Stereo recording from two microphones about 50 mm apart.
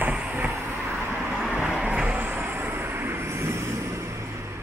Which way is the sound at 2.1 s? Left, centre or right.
Right.